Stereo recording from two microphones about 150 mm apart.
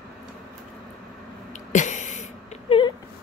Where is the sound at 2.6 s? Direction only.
35° left (ahead or behind).